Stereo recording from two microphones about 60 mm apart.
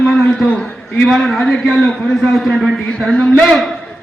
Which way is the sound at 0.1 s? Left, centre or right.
Centre.